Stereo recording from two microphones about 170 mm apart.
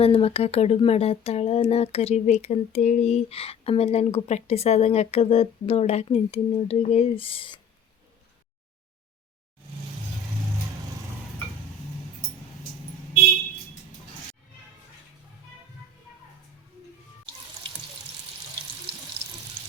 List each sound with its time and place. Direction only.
0.0 s speech: 35° left (ahead or behind)